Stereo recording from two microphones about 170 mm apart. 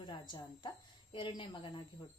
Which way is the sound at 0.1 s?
25° left (ahead or behind).